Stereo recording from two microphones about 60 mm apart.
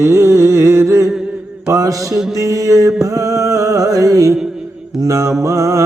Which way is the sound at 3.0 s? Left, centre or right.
Right.